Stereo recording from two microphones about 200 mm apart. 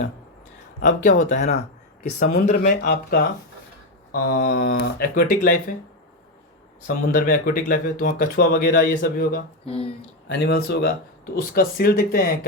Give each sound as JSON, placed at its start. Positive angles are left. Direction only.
{"t": 1.0, "sound": "speech", "side_deg": 40}
{"t": 2.3, "sound": "speech", "side_deg": 55}
{"t": 6.8, "sound": "speech", "side_deg": 45}
{"t": 9.6, "sound": "speech", "side_deg": 30}
{"t": 10.2, "sound": "speech", "side_deg": 55}